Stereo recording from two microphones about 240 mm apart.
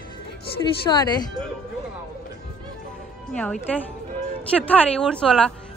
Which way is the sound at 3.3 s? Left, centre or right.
Centre.